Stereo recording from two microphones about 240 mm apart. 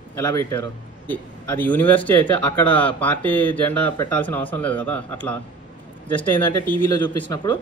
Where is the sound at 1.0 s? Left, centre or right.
Centre.